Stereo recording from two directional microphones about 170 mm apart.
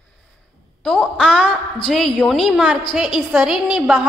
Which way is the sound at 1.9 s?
5° left (ahead or behind).